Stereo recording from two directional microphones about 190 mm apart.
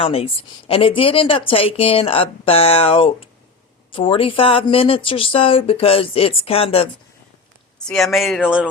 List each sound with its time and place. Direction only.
0.0 s a woman's voice: 30° left (ahead or behind)
7.9 s speech: centre (ahead or behind)